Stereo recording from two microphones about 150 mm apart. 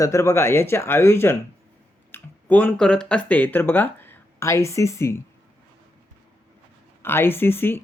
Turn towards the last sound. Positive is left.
turn(degrees=15)  # may be behind; listen again after turning